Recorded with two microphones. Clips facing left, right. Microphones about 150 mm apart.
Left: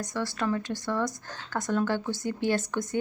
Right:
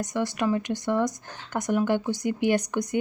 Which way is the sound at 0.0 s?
20° right (ahead or behind).